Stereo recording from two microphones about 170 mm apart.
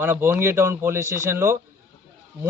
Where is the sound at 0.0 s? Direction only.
15° right (ahead or behind).